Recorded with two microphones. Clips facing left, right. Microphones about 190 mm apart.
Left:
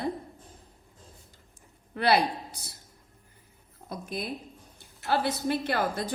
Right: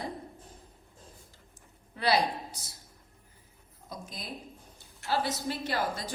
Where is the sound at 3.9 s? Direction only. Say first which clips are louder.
Left 7 dB; 60° left (ahead or behind).